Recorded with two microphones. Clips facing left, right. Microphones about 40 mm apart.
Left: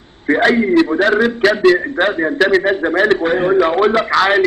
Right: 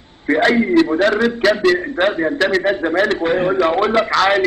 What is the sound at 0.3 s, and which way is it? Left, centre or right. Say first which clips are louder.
A man's voice: left 2 dB; centre.